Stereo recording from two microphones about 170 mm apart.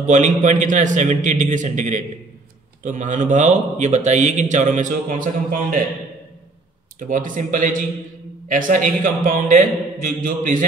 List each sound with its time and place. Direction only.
0.0 s a man's voice: 45° right (ahead or behind)
7.0 s a man's voice: 50° right (ahead or behind)